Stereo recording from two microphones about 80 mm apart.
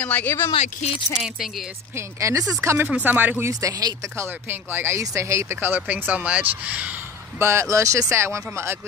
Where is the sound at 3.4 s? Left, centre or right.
Right.